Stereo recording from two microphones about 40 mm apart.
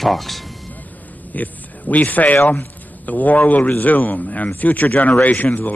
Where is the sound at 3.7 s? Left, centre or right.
Left.